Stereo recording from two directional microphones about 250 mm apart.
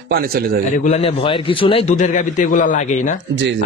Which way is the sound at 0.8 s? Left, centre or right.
Left.